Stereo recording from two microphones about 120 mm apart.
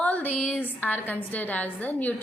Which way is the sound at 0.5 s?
15° left (ahead or behind).